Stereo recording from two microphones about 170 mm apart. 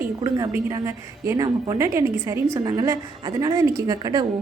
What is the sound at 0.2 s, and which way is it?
A woman's voice, 20° right (ahead or behind).